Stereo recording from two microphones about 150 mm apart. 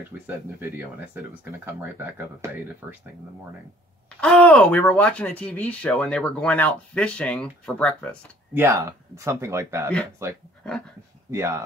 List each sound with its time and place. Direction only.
0.6 s speech: 15° right (ahead or behind)
4.2 s speech: 5° left (ahead or behind)
8.5 s speech: 20° right (ahead or behind)